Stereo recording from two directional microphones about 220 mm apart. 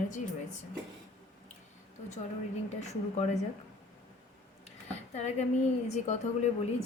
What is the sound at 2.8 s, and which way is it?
Speech, 30° left (ahead or behind).